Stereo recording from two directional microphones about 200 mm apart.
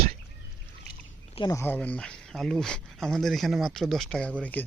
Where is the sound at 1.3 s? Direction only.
20° left (ahead or behind).